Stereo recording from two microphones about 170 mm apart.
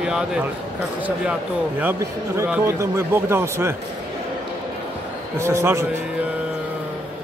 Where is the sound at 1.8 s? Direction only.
15° right (ahead or behind).